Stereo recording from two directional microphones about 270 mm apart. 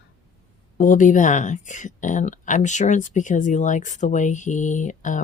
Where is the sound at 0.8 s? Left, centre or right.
Left.